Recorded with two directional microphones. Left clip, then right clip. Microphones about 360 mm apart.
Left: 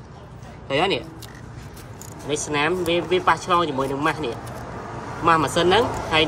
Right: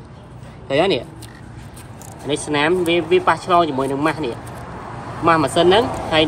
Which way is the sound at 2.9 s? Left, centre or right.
Left.